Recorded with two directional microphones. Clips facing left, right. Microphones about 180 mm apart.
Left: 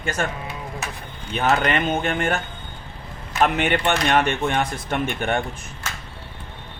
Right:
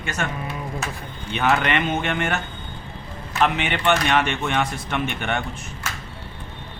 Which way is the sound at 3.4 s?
45° left (ahead or behind).